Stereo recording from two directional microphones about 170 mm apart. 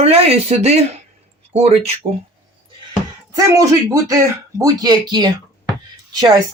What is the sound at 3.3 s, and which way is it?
Speech, 20° right (ahead or behind).